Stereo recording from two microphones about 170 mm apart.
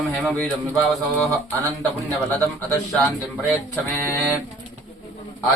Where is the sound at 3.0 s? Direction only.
5° left (ahead or behind).